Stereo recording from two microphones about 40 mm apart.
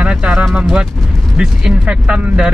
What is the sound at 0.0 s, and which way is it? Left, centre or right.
Vehicle, right.